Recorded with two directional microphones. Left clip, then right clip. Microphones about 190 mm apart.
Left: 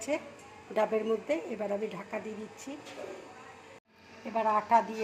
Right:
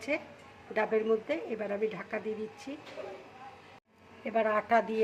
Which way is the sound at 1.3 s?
15° right (ahead or behind).